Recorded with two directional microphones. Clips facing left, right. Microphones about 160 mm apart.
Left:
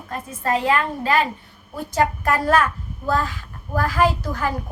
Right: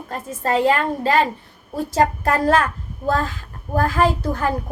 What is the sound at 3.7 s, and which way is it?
Speech, 50° right (ahead or behind).